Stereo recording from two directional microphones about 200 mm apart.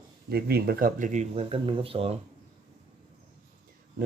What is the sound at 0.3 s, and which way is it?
Speech, 50° right (ahead or behind).